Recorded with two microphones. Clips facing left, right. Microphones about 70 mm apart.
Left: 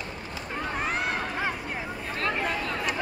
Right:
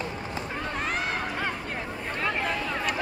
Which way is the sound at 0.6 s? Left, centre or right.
Centre.